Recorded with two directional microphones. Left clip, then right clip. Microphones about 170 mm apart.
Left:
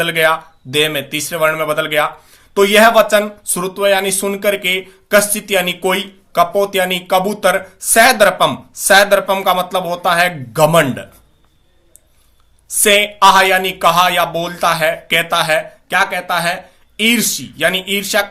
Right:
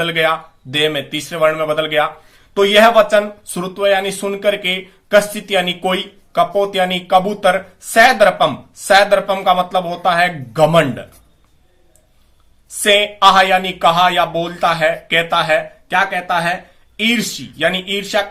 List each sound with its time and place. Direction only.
0.0 s speech: 20° left (ahead or behind)
12.6 s speech: 20° left (ahead or behind)